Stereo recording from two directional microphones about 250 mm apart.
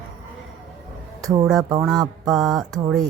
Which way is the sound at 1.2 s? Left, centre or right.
Centre.